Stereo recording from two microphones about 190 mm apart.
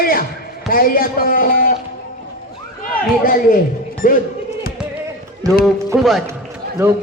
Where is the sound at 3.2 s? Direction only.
50° left (ahead or behind).